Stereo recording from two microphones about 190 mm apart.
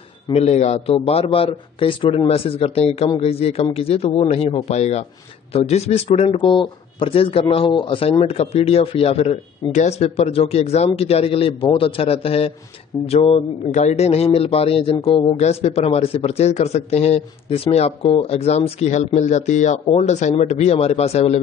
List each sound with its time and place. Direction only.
0.3 s speech: 35° left (ahead or behind)